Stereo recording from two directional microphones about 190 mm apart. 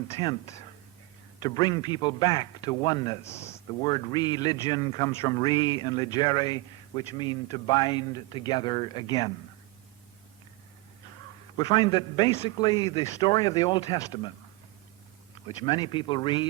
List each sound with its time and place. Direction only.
0.2 s speech: 20° left (ahead or behind)
11.5 s speech: 25° left (ahead or behind)
15.4 s speech: 25° left (ahead or behind)